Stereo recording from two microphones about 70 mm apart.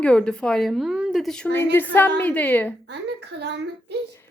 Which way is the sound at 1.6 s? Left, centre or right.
Left.